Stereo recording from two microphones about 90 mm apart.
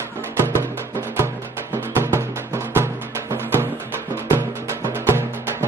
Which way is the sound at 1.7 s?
25° right (ahead or behind).